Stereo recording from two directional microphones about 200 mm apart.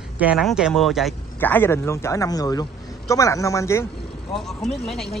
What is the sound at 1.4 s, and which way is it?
Speech, 10° left (ahead or behind).